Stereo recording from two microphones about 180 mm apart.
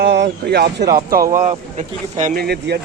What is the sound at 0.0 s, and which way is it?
Speech, 70° right (ahead or behind).